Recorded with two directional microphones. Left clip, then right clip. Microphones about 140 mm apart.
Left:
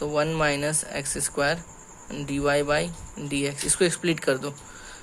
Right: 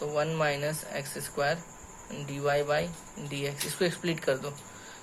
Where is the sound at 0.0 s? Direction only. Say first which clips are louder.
Left 5 dB; 45° left (ahead or behind).